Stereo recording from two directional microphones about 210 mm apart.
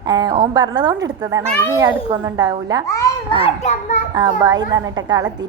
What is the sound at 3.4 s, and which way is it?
Speech, 30° left (ahead or behind).